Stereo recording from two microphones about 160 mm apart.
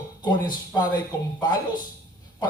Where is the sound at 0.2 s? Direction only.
25° left (ahead or behind).